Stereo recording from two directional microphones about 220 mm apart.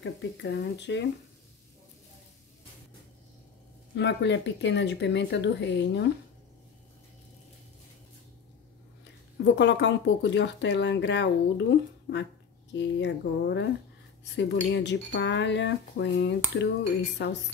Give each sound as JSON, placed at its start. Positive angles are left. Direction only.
{"t": 0.0, "sound": "speech", "side_deg": 55}
{"t": 3.9, "sound": "speech", "side_deg": 55}
{"t": 9.4, "sound": "speech", "side_deg": 55}